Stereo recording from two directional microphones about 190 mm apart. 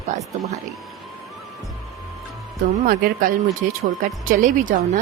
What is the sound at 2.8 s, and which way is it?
Speech, 50° right (ahead or behind).